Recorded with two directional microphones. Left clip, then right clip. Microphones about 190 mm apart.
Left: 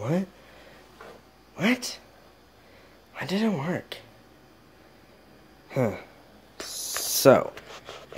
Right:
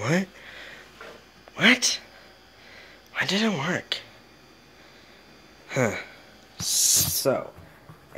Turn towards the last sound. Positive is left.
turn(degrees=50)  # may be behind; listen again after turning